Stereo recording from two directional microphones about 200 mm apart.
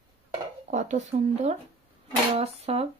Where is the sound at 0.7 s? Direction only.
35° right (ahead or behind).